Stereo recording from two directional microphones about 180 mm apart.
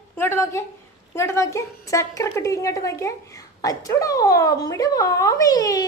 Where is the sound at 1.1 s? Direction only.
15° left (ahead or behind).